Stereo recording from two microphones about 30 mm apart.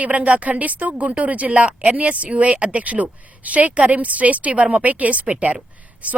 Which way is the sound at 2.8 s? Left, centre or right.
Right.